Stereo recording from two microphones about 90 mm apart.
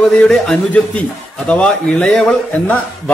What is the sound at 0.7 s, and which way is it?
A man's voice, 15° left (ahead or behind).